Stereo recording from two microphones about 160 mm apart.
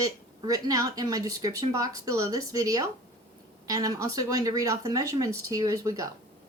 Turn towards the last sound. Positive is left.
turn(degrees=-20)  # may be behind; listen again after turning